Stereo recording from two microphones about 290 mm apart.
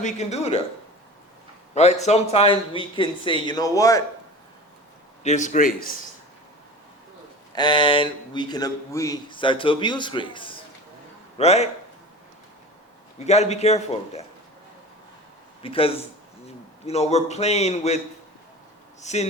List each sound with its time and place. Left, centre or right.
0.0 s a man's voice: left
1.7 s a man's voice: left
5.2 s a man's voice: left
7.5 s a man's voice: centre
13.1 s a man's voice: left
15.6 s a man's voice: centre
19.0 s a man's voice: left